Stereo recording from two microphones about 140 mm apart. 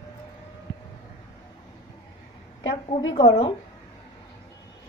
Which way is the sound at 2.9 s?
35° left (ahead or behind).